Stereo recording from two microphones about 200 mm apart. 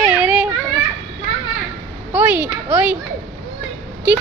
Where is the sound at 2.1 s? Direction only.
10° right (ahead or behind).